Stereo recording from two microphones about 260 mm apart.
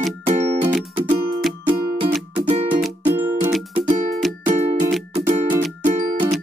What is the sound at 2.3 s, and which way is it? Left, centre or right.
Music, centre.